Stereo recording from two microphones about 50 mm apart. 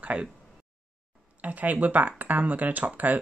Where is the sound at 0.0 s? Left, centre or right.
Right.